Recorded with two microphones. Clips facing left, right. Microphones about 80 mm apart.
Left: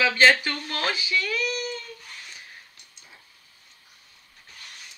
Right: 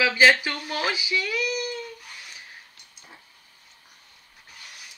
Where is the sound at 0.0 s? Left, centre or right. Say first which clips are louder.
Even; centre.